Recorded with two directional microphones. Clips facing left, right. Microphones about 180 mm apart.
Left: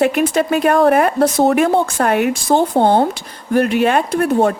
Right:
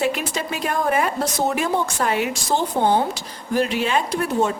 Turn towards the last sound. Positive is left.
turn(degrees=60)  # may be behind; listen again after turning